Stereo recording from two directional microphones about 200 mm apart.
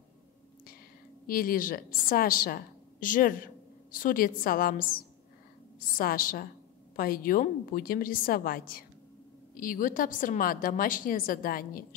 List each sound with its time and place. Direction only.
1.2 s a woman's voice: 45° left (ahead or behind)